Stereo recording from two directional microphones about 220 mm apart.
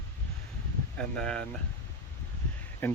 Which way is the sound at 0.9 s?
5° left (ahead or behind).